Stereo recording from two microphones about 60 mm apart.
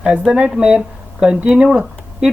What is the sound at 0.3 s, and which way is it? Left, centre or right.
Speech, centre.